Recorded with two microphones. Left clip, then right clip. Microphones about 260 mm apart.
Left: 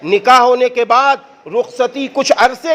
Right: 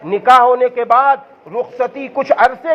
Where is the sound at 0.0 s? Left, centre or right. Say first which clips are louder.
Left 1 dB; left.